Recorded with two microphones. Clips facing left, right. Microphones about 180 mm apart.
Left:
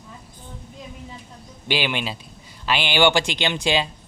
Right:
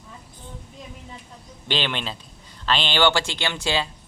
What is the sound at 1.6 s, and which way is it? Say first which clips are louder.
Speech: left 2 dB; 10° left (ahead or behind).